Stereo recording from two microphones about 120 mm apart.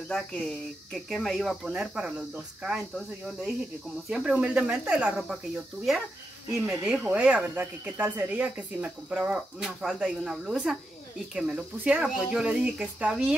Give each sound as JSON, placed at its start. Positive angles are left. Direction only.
{"t": 0.1, "sound": "speech", "side_deg": 10}
{"t": 4.1, "sound": "speech", "side_deg": -10}
{"t": 6.7, "sound": "speech", "side_deg": -5}